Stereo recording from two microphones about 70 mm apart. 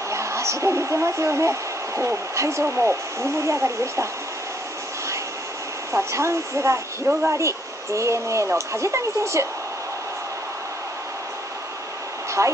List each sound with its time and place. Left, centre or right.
0.1 s speech: right
5.9 s speech: right
12.4 s speech: right